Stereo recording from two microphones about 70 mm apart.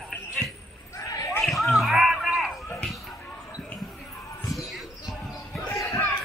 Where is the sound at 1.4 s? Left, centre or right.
Centre.